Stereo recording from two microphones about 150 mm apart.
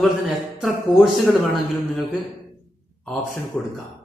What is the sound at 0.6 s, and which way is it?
Speech, centre (ahead or behind).